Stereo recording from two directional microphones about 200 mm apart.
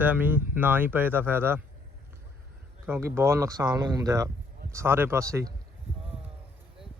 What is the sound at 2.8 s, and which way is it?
Speech, 10° right (ahead or behind).